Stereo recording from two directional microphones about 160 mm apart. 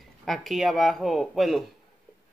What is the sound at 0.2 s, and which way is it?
Speech, centre (ahead or behind).